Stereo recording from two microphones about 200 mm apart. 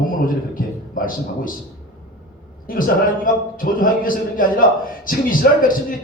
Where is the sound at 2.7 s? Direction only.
45° left (ahead or behind).